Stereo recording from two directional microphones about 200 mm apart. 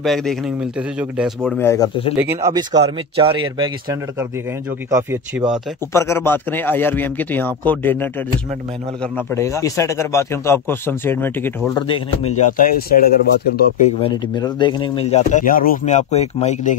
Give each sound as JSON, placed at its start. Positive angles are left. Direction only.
{"t": 0.0, "sound": "a man's voice", "side_deg": 0}
{"t": 1.6, "sound": "speech", "side_deg": 15}
{"t": 2.1, "sound": "speech", "side_deg": -10}
{"t": 2.5, "sound": "speech", "side_deg": -25}
{"t": 5.9, "sound": "speech", "side_deg": 15}
{"t": 11.9, "sound": "speech", "side_deg": 30}
{"t": 14.0, "sound": "speech", "side_deg": 20}